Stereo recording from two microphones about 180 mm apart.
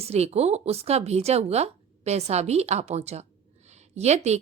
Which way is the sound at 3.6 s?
40° right (ahead or behind).